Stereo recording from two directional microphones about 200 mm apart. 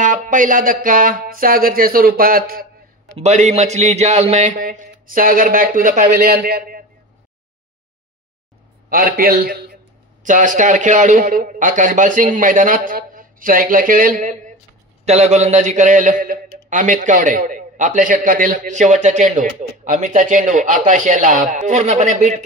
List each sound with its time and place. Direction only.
0.0 s speech: 40° right (ahead or behind)
3.2 s a man's voice: 35° right (ahead or behind)
8.8 s a man's voice: 45° right (ahead or behind)